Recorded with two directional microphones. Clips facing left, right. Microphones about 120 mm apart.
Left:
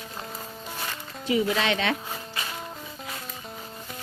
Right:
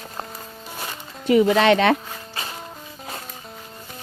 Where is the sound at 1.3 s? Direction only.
60° right (ahead or behind).